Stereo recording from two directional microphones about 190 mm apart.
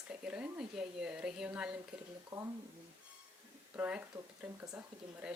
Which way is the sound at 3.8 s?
10° right (ahead or behind).